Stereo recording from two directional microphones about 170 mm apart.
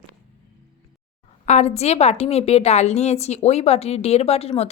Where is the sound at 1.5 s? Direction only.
40° left (ahead or behind).